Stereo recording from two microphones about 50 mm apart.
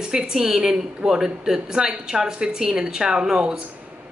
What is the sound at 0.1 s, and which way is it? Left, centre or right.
Speech, centre.